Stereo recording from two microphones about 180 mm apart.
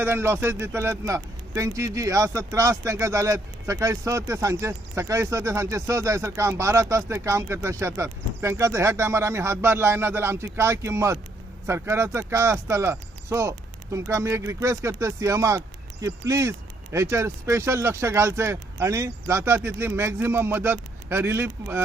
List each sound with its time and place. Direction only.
0.0 s speech: 15° right (ahead or behind)